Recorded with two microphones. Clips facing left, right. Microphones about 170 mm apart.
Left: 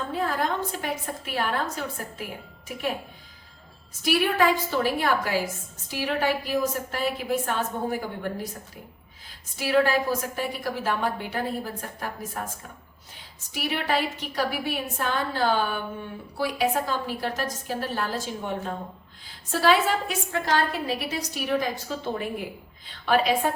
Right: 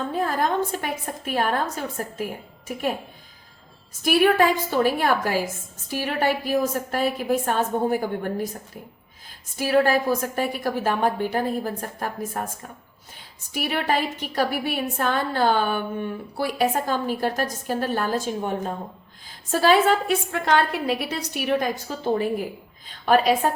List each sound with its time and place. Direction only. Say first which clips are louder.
0.1 s a woman's voice: right 3 dB; 45° right (ahead or behind)
4.0 s a woman's voice: right 4 dB; 50° right (ahead or behind)
9.6 s a woman's voice: right 3 dB; 45° right (ahead or behind)
13.5 s a woman's voice: right 3 dB; 50° right (ahead or behind)
23.0 s a woman's voice: right 4 dB; 40° right (ahead or behind)